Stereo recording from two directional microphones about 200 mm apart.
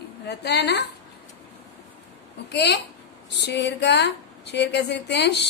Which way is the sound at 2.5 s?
55° left (ahead or behind).